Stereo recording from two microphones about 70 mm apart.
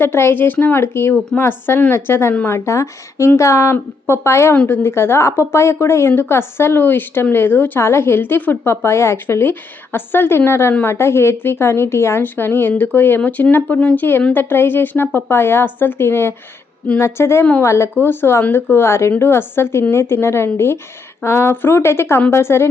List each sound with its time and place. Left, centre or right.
0.0 s speech: left
4.5 s speech: left
8.6 s speech: left
9.1 s speech: left
18.0 s speech: left